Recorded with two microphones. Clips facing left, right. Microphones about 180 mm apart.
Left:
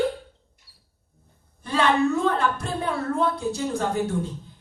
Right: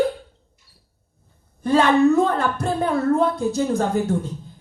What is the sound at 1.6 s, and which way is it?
Speech, 45° right (ahead or behind).